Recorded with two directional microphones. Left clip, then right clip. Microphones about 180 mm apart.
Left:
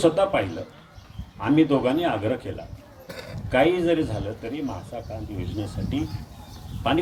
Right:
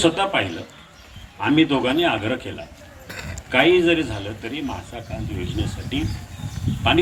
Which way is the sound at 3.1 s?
80° left.